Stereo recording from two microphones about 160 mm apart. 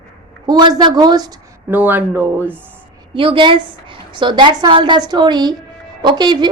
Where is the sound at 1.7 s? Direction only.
10° right (ahead or behind).